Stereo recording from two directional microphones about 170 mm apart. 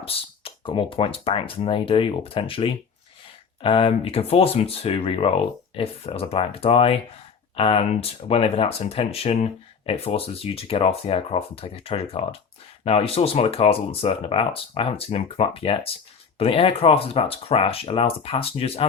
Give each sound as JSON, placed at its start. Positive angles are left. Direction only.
{"t": 0.0, "sound": "speech", "side_deg": 35}